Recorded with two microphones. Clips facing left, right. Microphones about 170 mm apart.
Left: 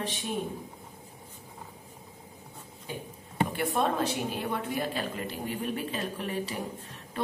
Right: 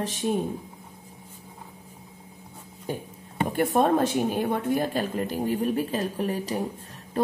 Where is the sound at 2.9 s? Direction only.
45° right (ahead or behind).